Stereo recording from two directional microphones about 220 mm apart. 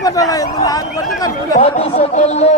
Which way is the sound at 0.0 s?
15° left (ahead or behind).